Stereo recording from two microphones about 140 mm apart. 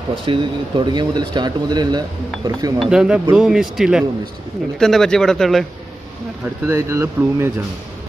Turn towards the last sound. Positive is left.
turn(degrees=-20)  # may be behind; listen again after turning